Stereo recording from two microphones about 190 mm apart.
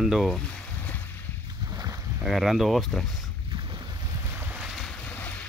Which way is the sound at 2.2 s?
Centre (ahead or behind).